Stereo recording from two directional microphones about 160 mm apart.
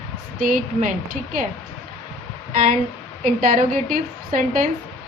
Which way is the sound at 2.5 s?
60° right (ahead or behind).